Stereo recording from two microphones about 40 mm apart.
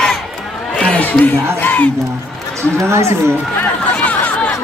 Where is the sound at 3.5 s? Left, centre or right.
Left.